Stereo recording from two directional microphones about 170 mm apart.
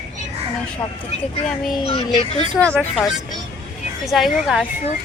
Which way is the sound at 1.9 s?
35° left (ahead or behind).